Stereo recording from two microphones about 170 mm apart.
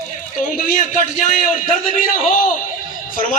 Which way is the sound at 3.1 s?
50° left (ahead or behind).